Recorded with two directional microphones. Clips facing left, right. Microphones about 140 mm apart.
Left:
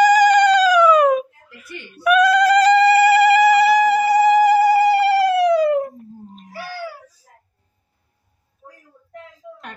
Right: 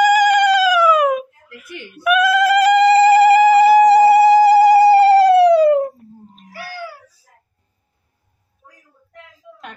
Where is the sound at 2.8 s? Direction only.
30° right (ahead or behind).